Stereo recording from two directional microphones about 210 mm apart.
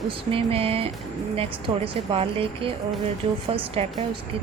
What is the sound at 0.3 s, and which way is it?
Speech, 25° right (ahead or behind).